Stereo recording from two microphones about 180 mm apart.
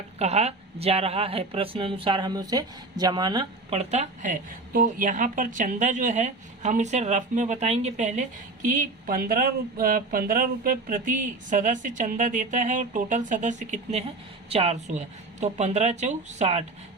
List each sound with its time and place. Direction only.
0.2 s speech: 35° right (ahead or behind)
3.7 s a woman's voice: 35° right (ahead or behind)